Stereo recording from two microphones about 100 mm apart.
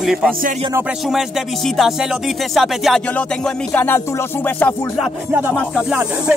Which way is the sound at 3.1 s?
15° left (ahead or behind).